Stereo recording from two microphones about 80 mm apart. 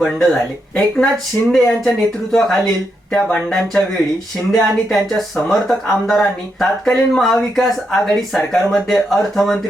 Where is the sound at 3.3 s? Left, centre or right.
Centre.